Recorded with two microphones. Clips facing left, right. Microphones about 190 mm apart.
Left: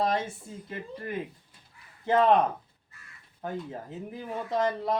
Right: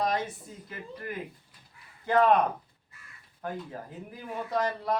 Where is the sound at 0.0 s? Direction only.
25° left (ahead or behind).